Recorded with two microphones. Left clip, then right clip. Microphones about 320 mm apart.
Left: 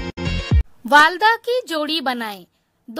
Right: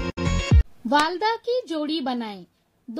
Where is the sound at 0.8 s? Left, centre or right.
Left.